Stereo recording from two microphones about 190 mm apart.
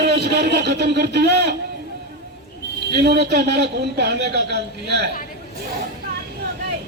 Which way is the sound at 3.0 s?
60° right (ahead or behind).